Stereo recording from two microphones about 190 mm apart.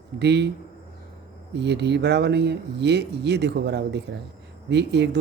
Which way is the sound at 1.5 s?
65° right (ahead or behind).